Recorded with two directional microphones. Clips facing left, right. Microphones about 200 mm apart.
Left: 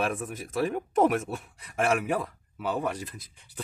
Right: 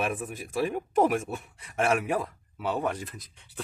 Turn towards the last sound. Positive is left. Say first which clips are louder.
# right 1 dB
turn(degrees=0)  # may be behind; listen again after turning